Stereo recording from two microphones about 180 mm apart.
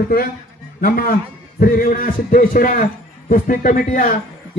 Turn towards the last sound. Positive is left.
turn(degrees=50)  # may be behind; listen again after turning